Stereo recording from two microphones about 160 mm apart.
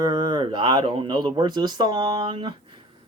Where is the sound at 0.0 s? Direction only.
30° right (ahead or behind).